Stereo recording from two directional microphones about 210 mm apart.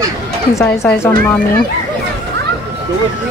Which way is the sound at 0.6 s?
10° left (ahead or behind).